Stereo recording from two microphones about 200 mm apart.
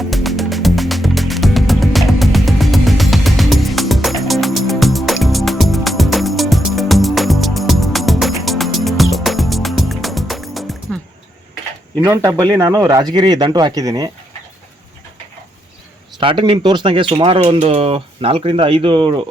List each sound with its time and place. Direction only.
0.0 s music: centre (ahead or behind)
12.0 s speech: 15° right (ahead or behind)
16.2 s speech: 25° right (ahead or behind)